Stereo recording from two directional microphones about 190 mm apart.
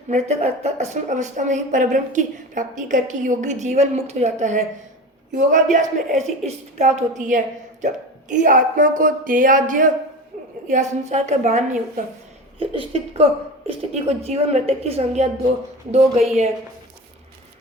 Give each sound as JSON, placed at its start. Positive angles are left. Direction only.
{"t": 0.1, "sound": "a woman's voice", "side_deg": -35}
{"t": 12.5, "sound": "speech", "side_deg": -30}